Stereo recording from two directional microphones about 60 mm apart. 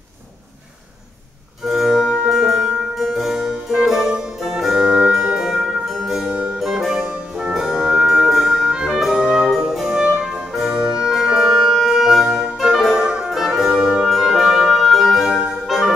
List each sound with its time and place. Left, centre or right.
1.7 s music: centre